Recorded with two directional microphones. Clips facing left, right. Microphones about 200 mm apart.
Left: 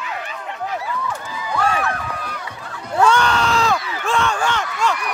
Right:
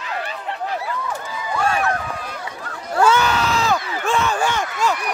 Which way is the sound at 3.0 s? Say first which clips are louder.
Even; 5° right (ahead or behind).